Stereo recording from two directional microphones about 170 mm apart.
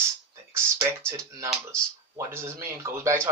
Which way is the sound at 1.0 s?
15° right (ahead or behind).